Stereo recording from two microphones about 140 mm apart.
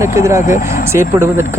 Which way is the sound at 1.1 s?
20° right (ahead or behind).